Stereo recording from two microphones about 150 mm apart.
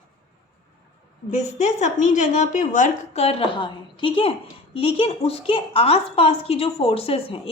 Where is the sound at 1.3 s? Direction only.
50° left (ahead or behind).